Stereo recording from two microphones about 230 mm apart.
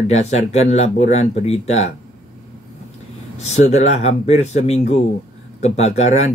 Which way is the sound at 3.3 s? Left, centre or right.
Left.